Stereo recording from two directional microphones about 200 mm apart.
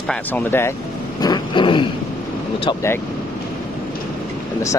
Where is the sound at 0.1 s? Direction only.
10° left (ahead or behind).